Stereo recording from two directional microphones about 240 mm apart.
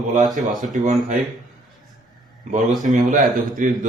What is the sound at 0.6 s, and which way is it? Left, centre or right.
Speech, right.